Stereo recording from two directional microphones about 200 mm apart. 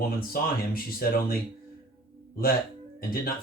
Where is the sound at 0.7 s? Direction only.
45° left (ahead or behind).